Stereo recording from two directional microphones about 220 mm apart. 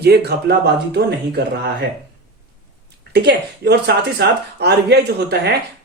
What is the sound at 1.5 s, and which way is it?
Speech, 45° right (ahead or behind).